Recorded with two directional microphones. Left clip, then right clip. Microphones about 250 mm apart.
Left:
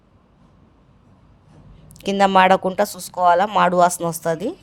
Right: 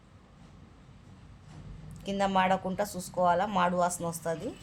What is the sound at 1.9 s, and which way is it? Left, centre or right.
Speech, left.